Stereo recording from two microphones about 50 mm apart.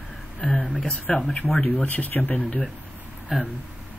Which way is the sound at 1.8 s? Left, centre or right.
Left.